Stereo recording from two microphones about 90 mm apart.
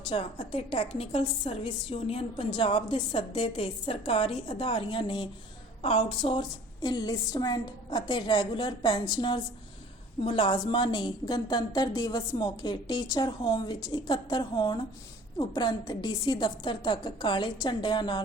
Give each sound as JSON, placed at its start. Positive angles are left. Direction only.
{"t": 0.1, "sound": "a woman's voice", "side_deg": 90}
{"t": 5.8, "sound": "a woman's voice", "side_deg": 90}
{"t": 6.8, "sound": "a woman's voice", "side_deg": 50}
{"t": 10.2, "sound": "a woman's voice", "side_deg": 75}
{"t": 10.7, "sound": "a woman's voice", "side_deg": 60}